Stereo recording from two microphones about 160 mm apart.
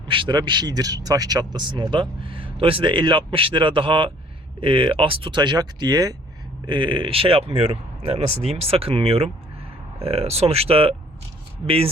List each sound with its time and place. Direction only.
0.1 s speech: 30° right (ahead or behind)